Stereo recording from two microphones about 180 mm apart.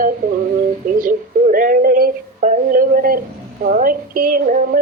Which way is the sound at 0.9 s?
50° right (ahead or behind).